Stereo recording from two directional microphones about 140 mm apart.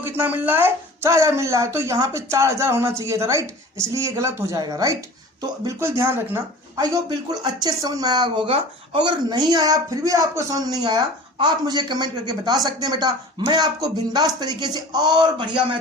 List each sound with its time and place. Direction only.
0.2 s speech: 15° right (ahead or behind)
6.7 s speech: 30° right (ahead or behind)